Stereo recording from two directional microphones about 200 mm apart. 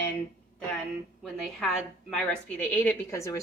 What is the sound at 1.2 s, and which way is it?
A woman's voice, centre (ahead or behind).